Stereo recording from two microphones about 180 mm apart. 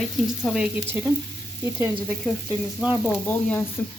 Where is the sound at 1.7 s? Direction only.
10° right (ahead or behind).